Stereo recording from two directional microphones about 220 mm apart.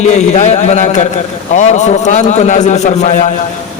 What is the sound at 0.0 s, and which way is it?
A man's voice, 30° left (ahead or behind).